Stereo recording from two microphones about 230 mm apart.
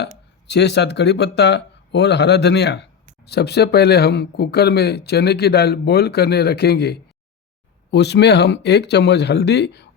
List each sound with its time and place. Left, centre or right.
0.4 s speech: left